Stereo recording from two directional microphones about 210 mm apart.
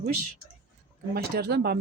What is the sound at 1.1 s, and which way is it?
Speech, 50° right (ahead or behind).